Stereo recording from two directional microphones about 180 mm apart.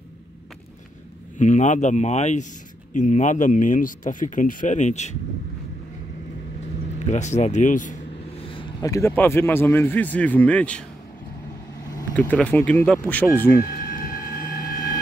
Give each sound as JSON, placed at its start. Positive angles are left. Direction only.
{"t": 1.4, "sound": "speech", "side_deg": 45}
{"t": 7.1, "sound": "speech", "side_deg": 40}
{"t": 8.4, "sound": "vehicle", "side_deg": 30}
{"t": 8.9, "sound": "speech", "side_deg": 15}
{"t": 12.2, "sound": "speech", "side_deg": 5}
{"t": 13.7, "sound": "a sound", "side_deg": 55}